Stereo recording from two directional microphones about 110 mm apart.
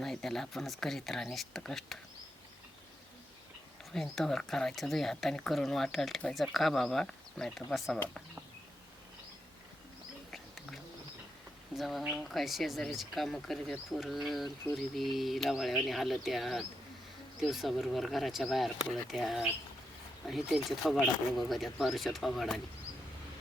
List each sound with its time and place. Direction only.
0.0 s speech: 5° left (ahead or behind)
3.9 s speech: 5° left (ahead or behind)
11.8 s speech: centre (ahead or behind)